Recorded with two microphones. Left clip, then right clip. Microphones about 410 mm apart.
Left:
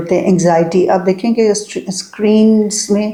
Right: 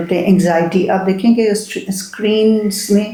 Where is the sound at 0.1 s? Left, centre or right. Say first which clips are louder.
Left 3 dB; left.